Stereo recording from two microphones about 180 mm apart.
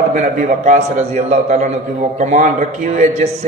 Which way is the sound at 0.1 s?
45° right (ahead or behind).